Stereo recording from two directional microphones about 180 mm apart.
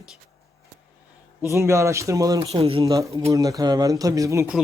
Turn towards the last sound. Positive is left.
turn(degrees=-15)  # may be behind; listen again after turning